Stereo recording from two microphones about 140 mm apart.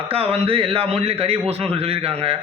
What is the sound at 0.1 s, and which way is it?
A man's voice, 45° right (ahead or behind).